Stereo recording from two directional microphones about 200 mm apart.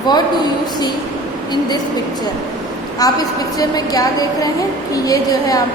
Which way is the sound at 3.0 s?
20° left (ahead or behind).